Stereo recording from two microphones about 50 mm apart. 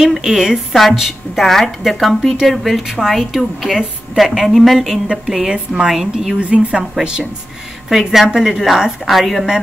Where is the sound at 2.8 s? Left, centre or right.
Centre.